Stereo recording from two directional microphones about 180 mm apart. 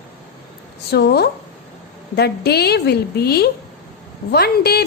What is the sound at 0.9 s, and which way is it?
A woman's voice, 65° left (ahead or behind).